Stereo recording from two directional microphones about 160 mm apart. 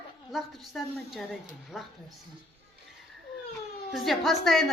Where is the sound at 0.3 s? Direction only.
Centre (ahead or behind).